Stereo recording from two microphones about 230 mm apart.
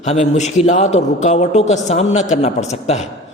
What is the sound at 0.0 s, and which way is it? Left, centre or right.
A man's voice, left.